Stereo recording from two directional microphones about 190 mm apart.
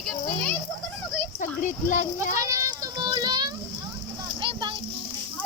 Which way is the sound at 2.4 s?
15° right (ahead or behind).